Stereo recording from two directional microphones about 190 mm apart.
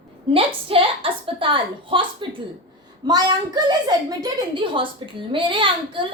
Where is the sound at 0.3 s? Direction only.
30° right (ahead or behind).